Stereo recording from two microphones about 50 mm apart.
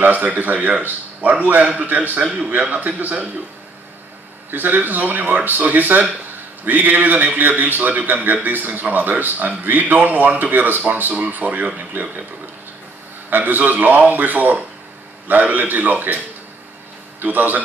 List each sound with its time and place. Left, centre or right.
0.0 s a man's voice: right
4.5 s a man's voice: right
13.3 s a man's voice: right
17.2 s a man's voice: right